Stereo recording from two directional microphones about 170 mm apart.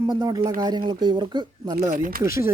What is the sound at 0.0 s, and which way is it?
Speech, 20° right (ahead or behind).